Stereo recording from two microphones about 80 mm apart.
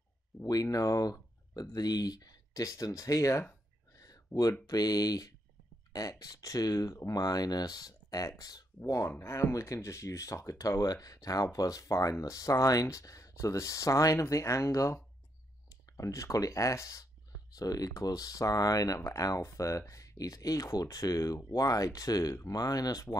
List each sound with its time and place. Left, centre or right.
0.4 s speech: left
3.9 s a sound: left
4.6 s speech: left